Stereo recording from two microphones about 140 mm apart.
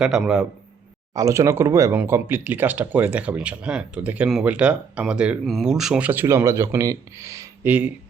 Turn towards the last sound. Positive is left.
turn(degrees=-20)  # may be behind; listen again after turning